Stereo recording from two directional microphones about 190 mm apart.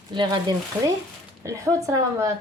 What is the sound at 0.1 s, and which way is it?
A woman's voice, 25° right (ahead or behind).